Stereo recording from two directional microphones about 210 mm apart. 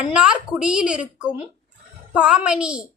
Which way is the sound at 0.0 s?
5° right (ahead or behind).